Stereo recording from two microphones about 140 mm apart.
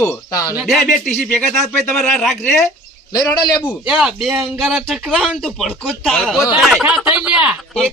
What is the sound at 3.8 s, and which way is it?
Speech, 5° right (ahead or behind).